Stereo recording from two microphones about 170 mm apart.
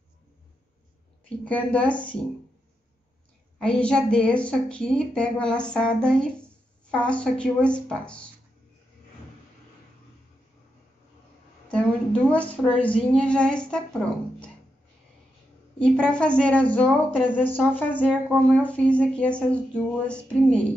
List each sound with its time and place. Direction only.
1.4 s a woman's voice: 10° left (ahead or behind)
3.5 s a woman's voice: 5° left (ahead or behind)
11.7 s a woman's voice: 5° left (ahead or behind)
15.8 s a woman's voice: 5° left (ahead or behind)